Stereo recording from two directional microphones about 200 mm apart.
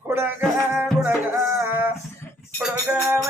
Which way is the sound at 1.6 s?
10° right (ahead or behind).